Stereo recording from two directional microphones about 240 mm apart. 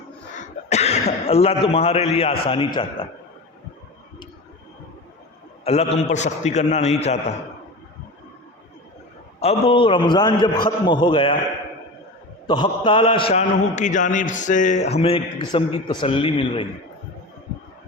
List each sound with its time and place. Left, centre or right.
0.3 s cough: left
2.5 s a man's voice: left
5.6 s a man's voice: left
9.4 s a man's voice: left
12.5 s a man's voice: centre